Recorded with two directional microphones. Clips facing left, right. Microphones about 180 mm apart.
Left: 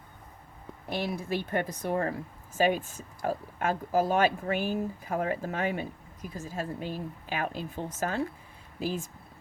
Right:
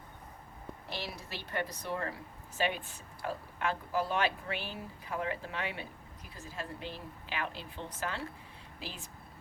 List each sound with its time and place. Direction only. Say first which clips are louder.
0.9 s speech: left 11 dB; 50° left (ahead or behind)